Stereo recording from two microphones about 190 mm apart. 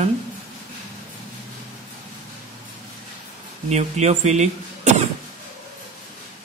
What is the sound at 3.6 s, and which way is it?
Speech, 35° right (ahead or behind).